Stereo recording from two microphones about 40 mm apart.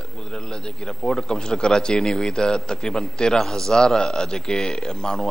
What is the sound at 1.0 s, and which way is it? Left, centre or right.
A man's voice, centre.